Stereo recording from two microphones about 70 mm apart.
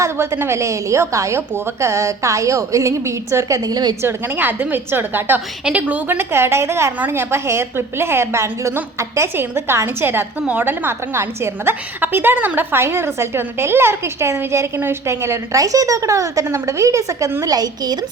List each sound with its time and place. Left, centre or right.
0.0 s a woman's voice: right
3.6 s a woman's voice: right
4.0 s a woman's voice: right
6.1 s a woman's voice: right
17.4 s a woman's voice: right